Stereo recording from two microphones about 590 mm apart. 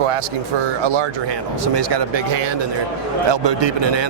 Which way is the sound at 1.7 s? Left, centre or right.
Right.